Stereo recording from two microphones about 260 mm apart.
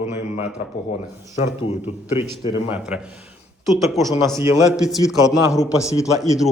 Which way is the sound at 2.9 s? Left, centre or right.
Centre.